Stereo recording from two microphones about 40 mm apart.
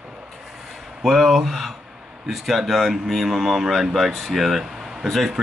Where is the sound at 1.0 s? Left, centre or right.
Centre.